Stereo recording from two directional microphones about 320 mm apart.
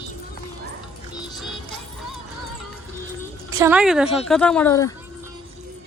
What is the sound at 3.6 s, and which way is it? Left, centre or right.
Speech, centre.